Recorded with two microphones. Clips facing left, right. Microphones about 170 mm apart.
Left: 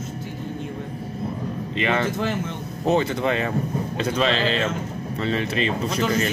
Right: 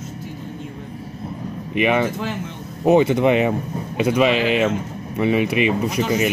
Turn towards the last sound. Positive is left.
turn(degrees=-15)  # may be behind; listen again after turning